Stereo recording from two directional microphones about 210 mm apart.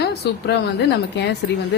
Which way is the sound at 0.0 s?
50° left (ahead or behind).